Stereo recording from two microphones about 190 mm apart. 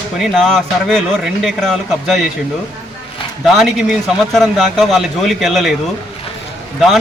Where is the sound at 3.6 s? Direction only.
Centre (ahead or behind).